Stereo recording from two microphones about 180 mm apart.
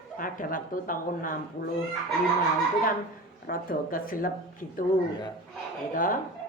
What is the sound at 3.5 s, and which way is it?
A woman's voice, 50° left (ahead or behind).